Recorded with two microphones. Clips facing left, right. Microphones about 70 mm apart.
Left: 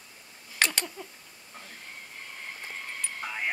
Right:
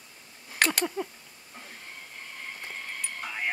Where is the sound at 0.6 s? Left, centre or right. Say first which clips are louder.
Right 2 dB; centre.